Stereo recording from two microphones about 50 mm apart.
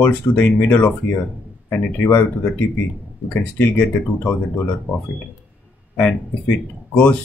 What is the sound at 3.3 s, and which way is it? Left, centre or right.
Speech, left.